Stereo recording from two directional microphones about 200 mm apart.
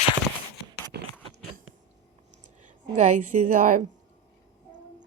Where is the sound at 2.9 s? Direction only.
40° right (ahead or behind).